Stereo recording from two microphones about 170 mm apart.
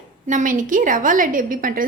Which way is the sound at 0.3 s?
50° right (ahead or behind).